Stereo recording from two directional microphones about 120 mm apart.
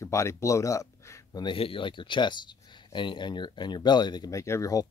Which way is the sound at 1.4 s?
45° left (ahead or behind).